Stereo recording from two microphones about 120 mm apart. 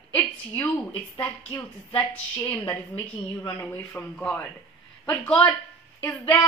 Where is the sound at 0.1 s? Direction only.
15° left (ahead or behind).